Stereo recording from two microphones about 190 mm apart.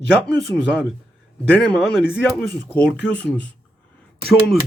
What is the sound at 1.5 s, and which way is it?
Speech, 5° left (ahead or behind).